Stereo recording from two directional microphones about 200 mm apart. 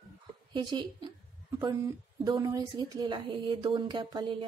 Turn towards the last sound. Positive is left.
turn(degrees=-25)  # may be behind; listen again after turning